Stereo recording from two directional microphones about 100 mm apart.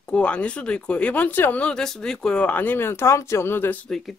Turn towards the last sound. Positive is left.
turn(degrees=25)  # may be behind; listen again after turning